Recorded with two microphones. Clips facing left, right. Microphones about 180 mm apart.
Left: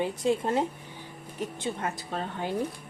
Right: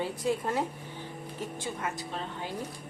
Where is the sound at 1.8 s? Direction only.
35° left (ahead or behind).